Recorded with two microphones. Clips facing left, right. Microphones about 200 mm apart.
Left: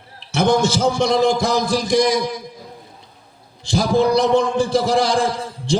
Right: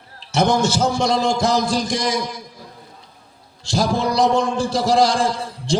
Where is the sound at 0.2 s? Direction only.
60° left (ahead or behind).